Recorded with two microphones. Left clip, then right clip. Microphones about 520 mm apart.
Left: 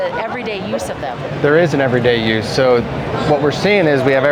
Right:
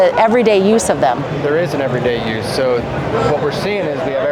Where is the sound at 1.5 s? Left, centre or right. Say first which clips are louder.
Left 4 dB; left.